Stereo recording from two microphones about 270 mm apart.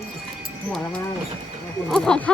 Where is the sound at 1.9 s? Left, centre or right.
Centre.